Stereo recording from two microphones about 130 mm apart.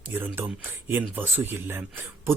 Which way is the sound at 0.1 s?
15° right (ahead or behind).